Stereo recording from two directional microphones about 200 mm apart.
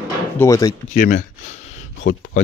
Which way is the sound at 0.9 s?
40° left (ahead or behind).